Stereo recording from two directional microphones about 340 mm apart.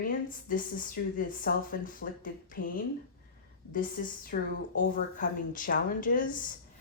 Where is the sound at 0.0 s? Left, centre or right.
Left.